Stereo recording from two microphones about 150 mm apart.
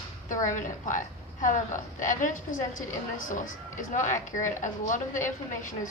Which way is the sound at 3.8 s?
55° left (ahead or behind).